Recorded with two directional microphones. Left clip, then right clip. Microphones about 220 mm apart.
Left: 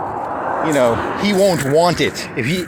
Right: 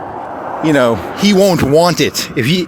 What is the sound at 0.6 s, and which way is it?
Speech, 60° right (ahead or behind).